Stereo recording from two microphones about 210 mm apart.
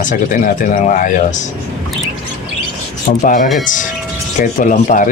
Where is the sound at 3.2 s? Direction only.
40° left (ahead or behind).